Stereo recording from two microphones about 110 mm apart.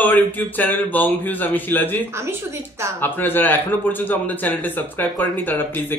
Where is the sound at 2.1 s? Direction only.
25° right (ahead or behind).